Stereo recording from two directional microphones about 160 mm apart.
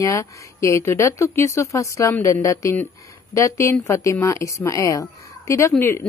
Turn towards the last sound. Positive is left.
turn(degrees=15)  # may be behind; listen again after turning